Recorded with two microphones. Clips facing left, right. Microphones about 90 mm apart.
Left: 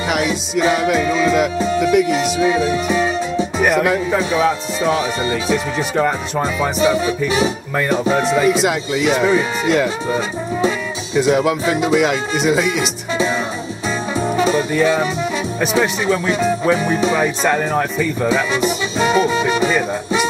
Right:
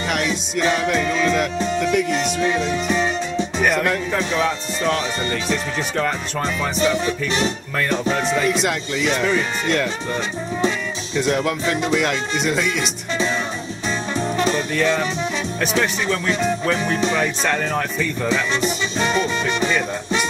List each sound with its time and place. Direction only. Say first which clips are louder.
0.1 s music: left 5 dB; 5° left (ahead or behind)
15.6 s speech: left 4 dB; 5° left (ahead or behind)